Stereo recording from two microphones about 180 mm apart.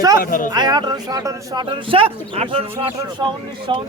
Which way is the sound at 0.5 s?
25° right (ahead or behind).